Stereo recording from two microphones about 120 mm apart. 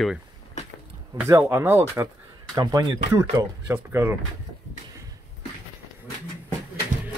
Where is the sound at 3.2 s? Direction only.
20° right (ahead or behind).